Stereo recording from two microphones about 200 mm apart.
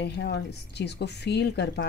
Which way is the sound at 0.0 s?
55° left (ahead or behind).